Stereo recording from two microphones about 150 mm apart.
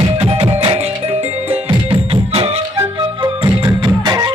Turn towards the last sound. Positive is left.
turn(degrees=-30)  # may be behind; listen again after turning